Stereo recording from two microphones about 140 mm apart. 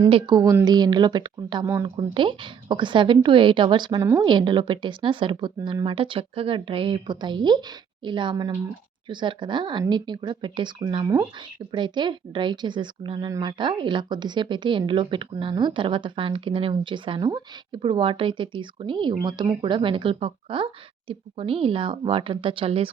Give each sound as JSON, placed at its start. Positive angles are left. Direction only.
{"t": 0.1, "sound": "a woman's voice", "side_deg": -30}
{"t": 1.6, "sound": "speech", "side_deg": -20}
{"t": 2.0, "sound": "a woman's voice", "side_deg": -35}